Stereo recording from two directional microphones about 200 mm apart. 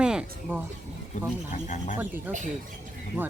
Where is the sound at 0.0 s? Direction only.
5° right (ahead or behind).